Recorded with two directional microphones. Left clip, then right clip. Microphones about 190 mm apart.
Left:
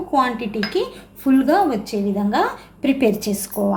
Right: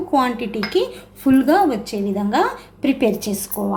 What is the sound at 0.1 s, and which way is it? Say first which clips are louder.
Speech: even; 10° right (ahead or behind).